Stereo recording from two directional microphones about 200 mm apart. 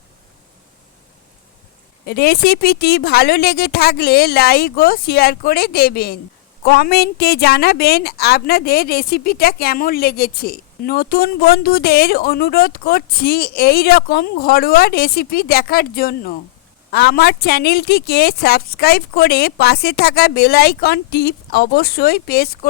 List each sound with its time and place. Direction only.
2.0 s a woman's voice: 55° left (ahead or behind)